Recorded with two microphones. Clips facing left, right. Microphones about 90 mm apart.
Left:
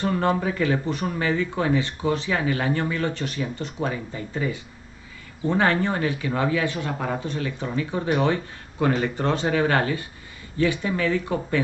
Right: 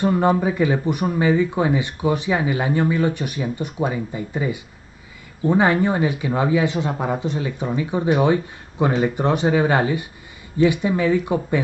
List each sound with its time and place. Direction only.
0.0 s speech: 15° right (ahead or behind)